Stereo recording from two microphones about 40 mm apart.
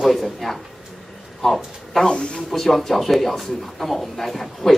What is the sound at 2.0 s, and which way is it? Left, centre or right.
Speech, left.